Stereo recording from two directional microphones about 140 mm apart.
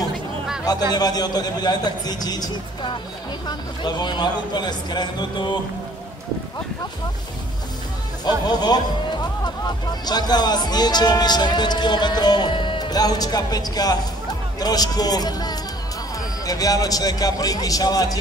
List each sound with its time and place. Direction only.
0.9 s a man's voice: 30° left (ahead or behind)
8.3 s a man's voice: 30° left (ahead or behind)
10.0 s a man's voice: 30° left (ahead or behind)